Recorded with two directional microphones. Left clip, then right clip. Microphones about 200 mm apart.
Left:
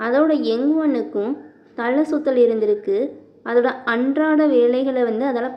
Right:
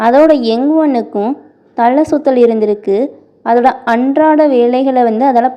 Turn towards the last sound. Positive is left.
turn(degrees=-35)  # may be behind; listen again after turning